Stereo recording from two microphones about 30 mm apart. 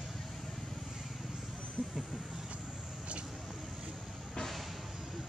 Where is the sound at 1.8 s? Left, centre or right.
Left.